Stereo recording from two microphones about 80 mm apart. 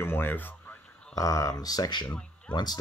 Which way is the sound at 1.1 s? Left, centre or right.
Left.